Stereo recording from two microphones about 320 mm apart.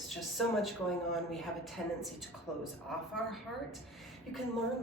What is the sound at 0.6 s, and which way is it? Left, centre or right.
Speech, centre.